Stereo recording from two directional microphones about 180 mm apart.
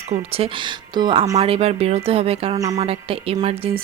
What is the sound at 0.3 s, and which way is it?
A woman's voice, 30° right (ahead or behind).